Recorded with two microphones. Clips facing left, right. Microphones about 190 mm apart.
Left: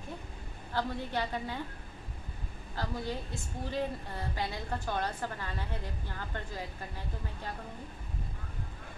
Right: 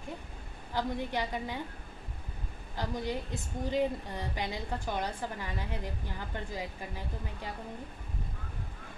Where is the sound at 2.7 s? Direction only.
15° right (ahead or behind).